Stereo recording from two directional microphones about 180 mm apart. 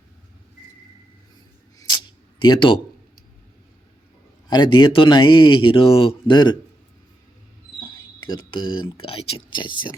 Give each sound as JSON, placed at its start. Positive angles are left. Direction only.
{"t": 1.8, "sound": "a sound", "side_deg": 25}
{"t": 4.4, "sound": "speech", "side_deg": 25}
{"t": 8.3, "sound": "speech", "side_deg": 25}